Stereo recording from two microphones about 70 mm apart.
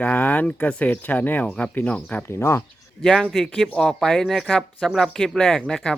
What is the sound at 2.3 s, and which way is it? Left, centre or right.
Speech, left.